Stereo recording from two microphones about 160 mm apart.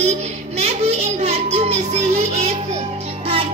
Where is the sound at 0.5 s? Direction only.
40° right (ahead or behind).